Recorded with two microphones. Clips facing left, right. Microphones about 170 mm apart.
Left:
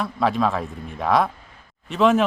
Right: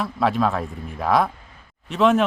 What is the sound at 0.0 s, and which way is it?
A man's voice, centre (ahead or behind).